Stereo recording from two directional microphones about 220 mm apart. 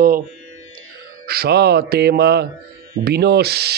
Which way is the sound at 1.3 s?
45° right (ahead or behind).